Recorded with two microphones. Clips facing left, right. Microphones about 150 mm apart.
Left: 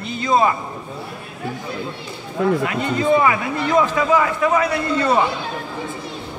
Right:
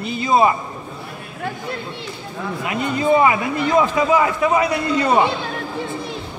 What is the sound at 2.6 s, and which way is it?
A man's voice, 20° right (ahead or behind).